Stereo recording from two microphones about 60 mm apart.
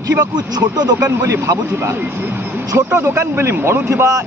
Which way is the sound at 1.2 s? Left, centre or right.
Right.